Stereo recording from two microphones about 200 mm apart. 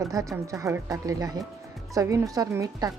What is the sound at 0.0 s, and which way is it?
Speech, 15° right (ahead or behind).